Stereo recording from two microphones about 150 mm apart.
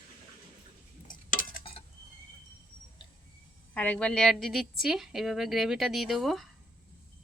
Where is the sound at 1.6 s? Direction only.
35° left (ahead or behind).